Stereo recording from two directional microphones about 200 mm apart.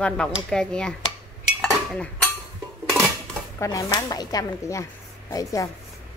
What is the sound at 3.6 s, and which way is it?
Speech, 15° left (ahead or behind).